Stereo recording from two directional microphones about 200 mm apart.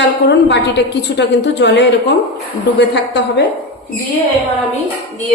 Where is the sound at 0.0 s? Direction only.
60° left (ahead or behind).